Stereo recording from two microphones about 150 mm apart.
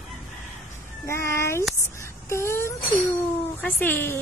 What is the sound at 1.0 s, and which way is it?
A woman's voice, 20° left (ahead or behind).